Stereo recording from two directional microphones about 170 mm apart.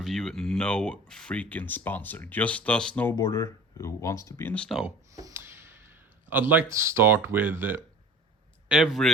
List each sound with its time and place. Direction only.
0.0 s speech: centre (ahead or behind)
5.1 s a sound: 15° right (ahead or behind)
6.3 s speech: 10° right (ahead or behind)
8.7 s speech: centre (ahead or behind)